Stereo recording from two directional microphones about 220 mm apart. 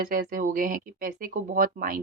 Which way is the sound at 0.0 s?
40° right (ahead or behind).